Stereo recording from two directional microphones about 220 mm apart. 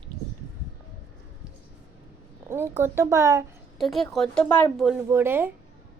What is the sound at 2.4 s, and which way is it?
A woman's voice, 10° right (ahead or behind).